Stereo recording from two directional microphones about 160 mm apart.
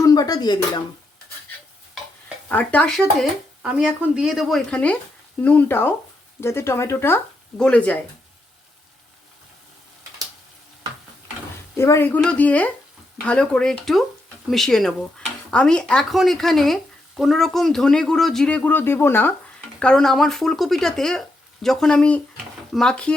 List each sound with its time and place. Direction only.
0.0 s speech: 25° left (ahead or behind)
2.5 s speech: 10° left (ahead or behind)
11.8 s speech: 15° left (ahead or behind)